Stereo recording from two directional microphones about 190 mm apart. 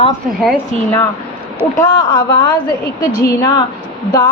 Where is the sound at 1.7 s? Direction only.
15° left (ahead or behind).